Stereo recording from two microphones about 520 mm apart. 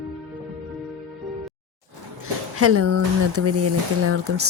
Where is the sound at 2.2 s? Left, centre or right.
Right.